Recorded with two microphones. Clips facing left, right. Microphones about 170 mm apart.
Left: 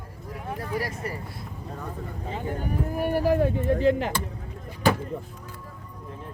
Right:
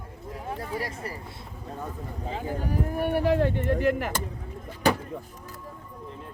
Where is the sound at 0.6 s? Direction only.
25° right (ahead or behind).